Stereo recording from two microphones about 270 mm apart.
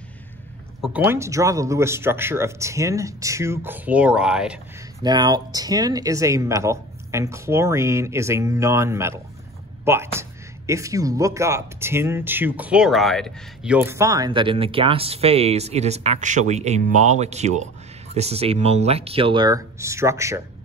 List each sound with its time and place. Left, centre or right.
0.8 s speech: centre
5.0 s speech: centre